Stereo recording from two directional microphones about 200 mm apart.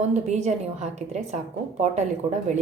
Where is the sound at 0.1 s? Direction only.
35° right (ahead or behind).